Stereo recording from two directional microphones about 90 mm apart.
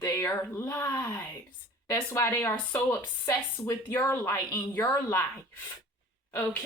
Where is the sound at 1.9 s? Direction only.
30° left (ahead or behind).